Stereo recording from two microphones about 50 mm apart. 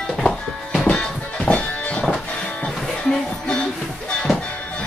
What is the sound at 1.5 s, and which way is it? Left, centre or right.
Music, left.